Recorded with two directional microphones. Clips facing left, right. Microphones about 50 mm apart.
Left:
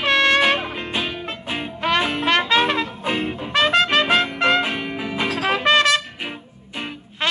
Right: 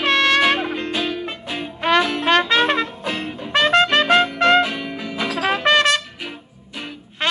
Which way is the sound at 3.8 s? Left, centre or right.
Left.